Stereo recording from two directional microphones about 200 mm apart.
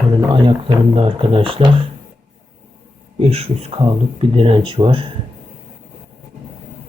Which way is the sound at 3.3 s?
30° right (ahead or behind).